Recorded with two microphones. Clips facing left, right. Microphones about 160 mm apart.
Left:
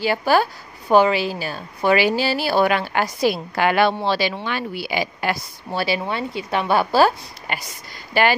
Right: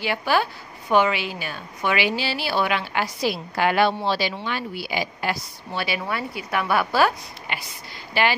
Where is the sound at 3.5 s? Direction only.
70° left (ahead or behind).